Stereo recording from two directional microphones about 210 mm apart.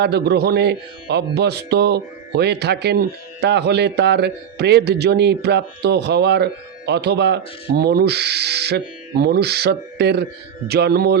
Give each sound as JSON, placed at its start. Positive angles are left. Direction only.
{"t": 0.0, "sound": "a man's voice", "side_deg": -50}